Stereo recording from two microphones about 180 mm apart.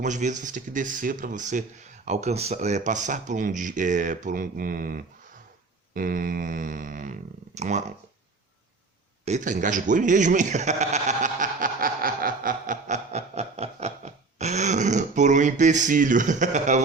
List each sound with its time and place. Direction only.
0.0 s speech: 40° right (ahead or behind)
9.2 s speech: 40° right (ahead or behind)